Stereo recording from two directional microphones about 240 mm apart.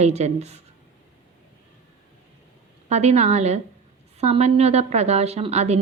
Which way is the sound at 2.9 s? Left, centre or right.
Right.